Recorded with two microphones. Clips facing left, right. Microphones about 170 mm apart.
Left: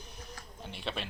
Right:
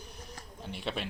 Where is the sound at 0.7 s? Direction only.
5° right (ahead or behind).